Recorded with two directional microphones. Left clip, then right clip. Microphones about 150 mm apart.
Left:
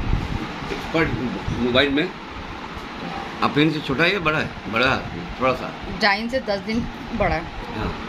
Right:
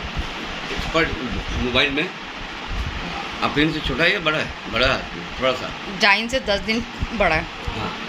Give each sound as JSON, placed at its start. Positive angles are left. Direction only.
{"t": 1.7, "sound": "speech", "side_deg": 90}
{"t": 3.3, "sound": "speech", "side_deg": 90}
{"t": 5.9, "sound": "speech", "side_deg": -5}